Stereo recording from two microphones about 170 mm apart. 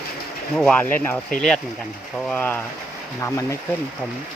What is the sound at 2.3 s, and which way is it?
Speech, 10° left (ahead or behind).